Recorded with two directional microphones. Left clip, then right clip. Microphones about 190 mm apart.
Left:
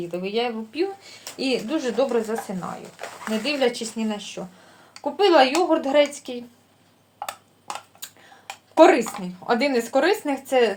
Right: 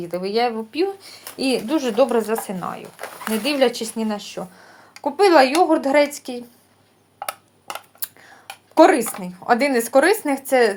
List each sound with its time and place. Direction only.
0.1 s speech: 40° right (ahead or behind)
7.2 s a sound: 15° right (ahead or behind)
8.8 s speech: 30° right (ahead or behind)